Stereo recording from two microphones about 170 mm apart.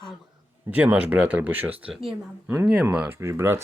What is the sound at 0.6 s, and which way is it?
Speech, 5° right (ahead or behind).